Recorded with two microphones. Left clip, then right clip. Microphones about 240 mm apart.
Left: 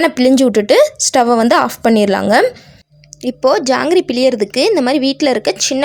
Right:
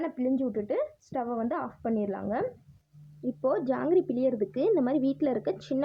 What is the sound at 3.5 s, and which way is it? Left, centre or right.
A woman's voice, left.